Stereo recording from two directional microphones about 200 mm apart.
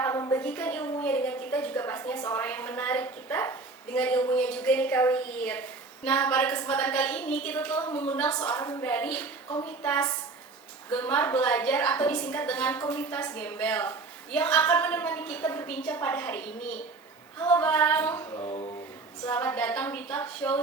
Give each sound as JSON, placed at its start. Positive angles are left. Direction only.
{"t": 0.0, "sound": "a woman's voice", "side_deg": 15}
{"t": 18.4, "sound": "a sound", "side_deg": 30}
{"t": 19.2, "sound": "a woman's voice", "side_deg": 10}